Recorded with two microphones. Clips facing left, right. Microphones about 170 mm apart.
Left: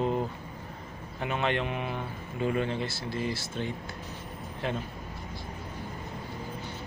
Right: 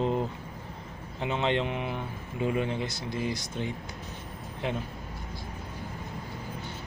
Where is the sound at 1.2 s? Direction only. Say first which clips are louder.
Right 2 dB; 20° right (ahead or behind).